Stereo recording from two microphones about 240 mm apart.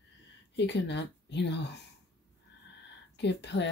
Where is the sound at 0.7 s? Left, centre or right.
Left.